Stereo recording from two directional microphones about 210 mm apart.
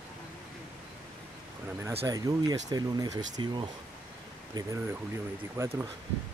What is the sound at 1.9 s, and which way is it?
Speech, 30° right (ahead or behind).